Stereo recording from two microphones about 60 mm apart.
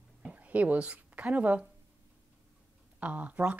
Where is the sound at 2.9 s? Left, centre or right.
Right.